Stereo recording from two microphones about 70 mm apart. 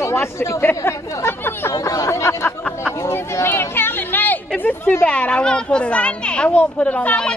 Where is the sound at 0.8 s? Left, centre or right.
Left.